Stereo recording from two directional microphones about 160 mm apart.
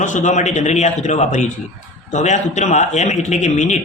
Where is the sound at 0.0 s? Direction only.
50° left (ahead or behind).